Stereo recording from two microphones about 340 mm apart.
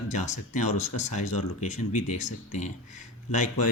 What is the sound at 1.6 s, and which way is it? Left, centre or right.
Speech, centre.